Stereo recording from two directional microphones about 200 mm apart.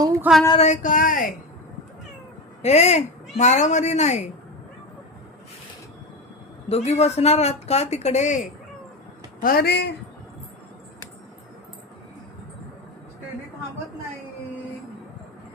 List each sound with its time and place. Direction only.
0.3 s a sound: 5° right (ahead or behind)
0.6 s speech: 40° left (ahead or behind)
2.6 s speech: 35° left (ahead or behind)
6.7 s speech: 30° left (ahead or behind)
9.4 s speech: 50° left (ahead or behind)